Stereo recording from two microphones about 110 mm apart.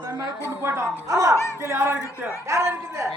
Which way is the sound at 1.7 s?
20° right (ahead or behind).